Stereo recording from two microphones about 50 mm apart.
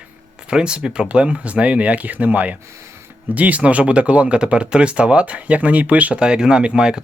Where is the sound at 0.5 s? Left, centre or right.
Centre.